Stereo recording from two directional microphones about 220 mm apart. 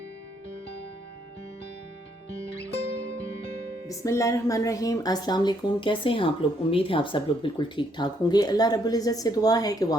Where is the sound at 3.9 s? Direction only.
15° left (ahead or behind).